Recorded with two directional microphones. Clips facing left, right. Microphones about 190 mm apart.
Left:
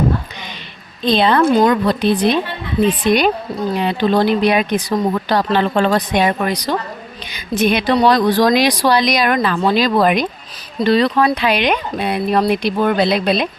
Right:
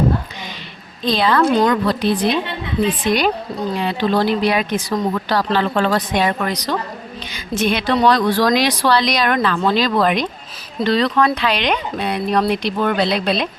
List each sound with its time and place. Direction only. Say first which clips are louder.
1.0 s a woman's voice: left 3 dB; 25° left (ahead or behind)